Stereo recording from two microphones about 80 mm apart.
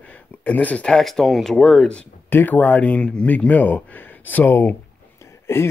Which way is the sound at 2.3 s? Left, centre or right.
Left.